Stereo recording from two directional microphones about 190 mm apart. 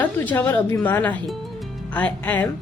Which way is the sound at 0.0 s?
10° left (ahead or behind).